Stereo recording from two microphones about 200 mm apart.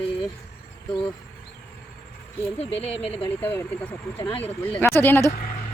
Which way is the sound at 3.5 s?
10° left (ahead or behind).